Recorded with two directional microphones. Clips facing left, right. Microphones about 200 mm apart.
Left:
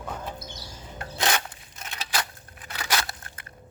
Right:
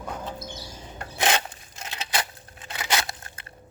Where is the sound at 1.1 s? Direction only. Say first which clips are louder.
Right 2 dB; 20° right (ahead or behind).